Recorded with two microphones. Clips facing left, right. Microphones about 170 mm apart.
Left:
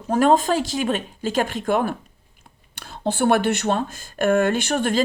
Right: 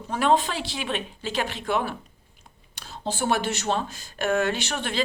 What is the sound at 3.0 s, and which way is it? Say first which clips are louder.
Speech: left 7 dB; 60° left (ahead or behind).